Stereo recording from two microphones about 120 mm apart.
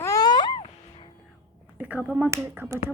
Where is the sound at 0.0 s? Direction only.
30° left (ahead or behind).